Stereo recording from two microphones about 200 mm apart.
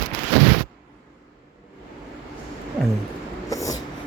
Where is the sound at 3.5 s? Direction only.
15° left (ahead or behind).